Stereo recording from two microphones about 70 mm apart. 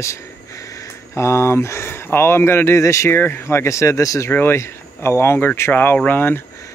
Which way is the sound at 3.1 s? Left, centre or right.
Left.